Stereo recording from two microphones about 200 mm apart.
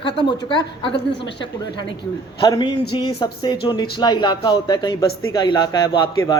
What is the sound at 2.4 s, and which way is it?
Speech, 20° left (ahead or behind).